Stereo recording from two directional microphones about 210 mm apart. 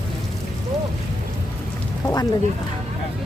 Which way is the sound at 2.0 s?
15° left (ahead or behind).